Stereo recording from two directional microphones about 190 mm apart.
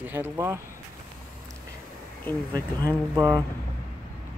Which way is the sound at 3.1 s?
20° right (ahead or behind).